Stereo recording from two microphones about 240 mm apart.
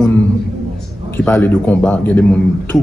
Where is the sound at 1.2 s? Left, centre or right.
Centre.